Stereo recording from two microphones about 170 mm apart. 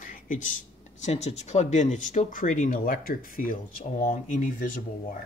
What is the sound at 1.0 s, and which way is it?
Speech, 40° left (ahead or behind).